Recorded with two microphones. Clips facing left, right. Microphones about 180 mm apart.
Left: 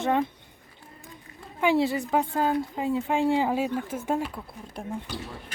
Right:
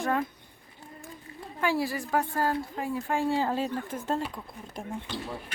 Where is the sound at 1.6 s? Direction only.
20° left (ahead or behind); by 5.2 s 5° left (ahead or behind).